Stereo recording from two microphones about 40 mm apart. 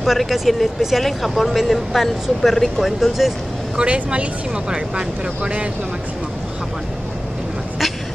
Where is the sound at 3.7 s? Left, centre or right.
Right.